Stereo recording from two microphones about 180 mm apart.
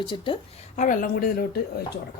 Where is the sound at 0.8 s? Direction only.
50° left (ahead or behind).